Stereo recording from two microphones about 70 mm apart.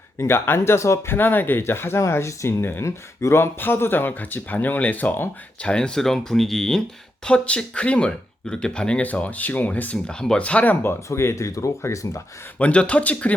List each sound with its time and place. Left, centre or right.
0.2 s speech: left
5.6 s speech: centre
10.1 s speech: centre
10.8 s speech: left
12.5 s speech: centre